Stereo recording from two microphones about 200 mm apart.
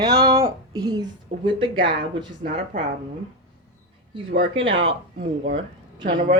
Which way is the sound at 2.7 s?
40° right (ahead or behind).